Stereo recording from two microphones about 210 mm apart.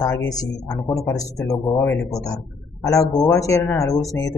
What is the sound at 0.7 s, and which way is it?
Speech, 15° left (ahead or behind).